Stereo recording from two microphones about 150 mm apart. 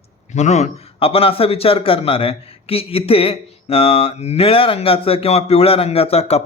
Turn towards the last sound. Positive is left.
turn(degrees=45)  # may be behind; listen again after turning